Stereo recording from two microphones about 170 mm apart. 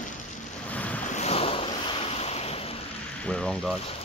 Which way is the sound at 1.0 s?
45° left (ahead or behind).